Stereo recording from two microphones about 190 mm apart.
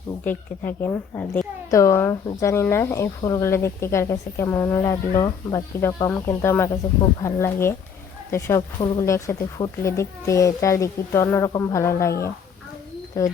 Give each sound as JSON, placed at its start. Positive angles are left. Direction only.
{"t": 0.3, "sound": "a woman's voice", "side_deg": 10}